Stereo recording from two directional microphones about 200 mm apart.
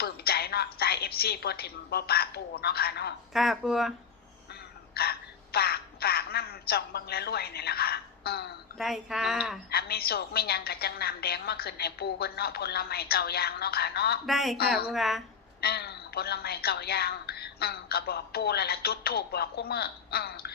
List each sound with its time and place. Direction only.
0.0 s a woman's voice: 50° left (ahead or behind)
3.3 s speech: centre (ahead or behind)
4.9 s a sound: 50° left (ahead or behind)
8.8 s speech: centre (ahead or behind)
9.6 s a woman's voice: 50° left (ahead or behind)
14.3 s speech: centre (ahead or behind)
15.6 s a woman's voice: 55° left (ahead or behind)